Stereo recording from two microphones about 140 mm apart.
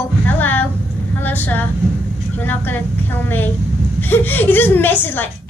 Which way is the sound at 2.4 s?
15° left (ahead or behind).